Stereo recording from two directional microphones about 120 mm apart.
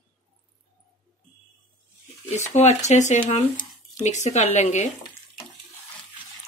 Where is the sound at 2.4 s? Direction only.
75° left (ahead or behind).